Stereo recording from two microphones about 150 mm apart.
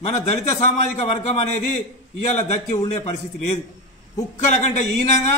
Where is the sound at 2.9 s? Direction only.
45° left (ahead or behind).